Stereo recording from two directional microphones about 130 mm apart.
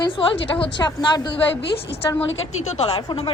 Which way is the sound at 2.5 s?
55° left (ahead or behind).